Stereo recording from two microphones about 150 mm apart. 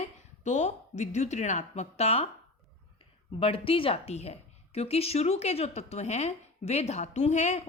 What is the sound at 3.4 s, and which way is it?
A woman's voice, 40° left (ahead or behind).